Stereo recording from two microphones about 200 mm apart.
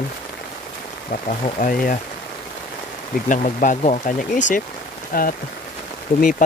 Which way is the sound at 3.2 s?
40° left (ahead or behind).